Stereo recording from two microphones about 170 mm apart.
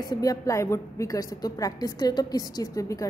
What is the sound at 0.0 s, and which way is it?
A woman's voice, 20° left (ahead or behind).